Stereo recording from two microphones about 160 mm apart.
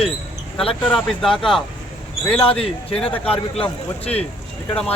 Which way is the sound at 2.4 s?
35° left (ahead or behind).